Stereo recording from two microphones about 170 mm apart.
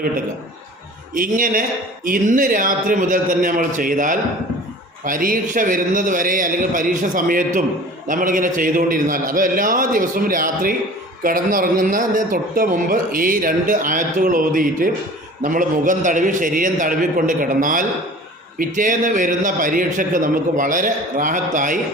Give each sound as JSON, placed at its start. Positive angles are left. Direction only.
{"t": 1.1, "sound": "speech", "side_deg": -50}